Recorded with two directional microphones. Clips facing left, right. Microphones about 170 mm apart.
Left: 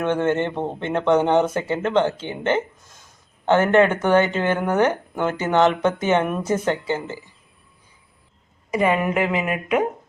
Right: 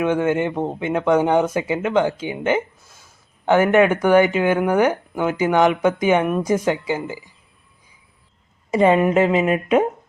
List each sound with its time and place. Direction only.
0.0 s speech: 10° right (ahead or behind)
8.7 s a woman's voice: 25° right (ahead or behind)